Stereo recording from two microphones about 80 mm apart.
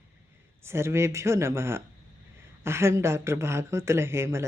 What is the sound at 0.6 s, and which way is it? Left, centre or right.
A woman's voice, right.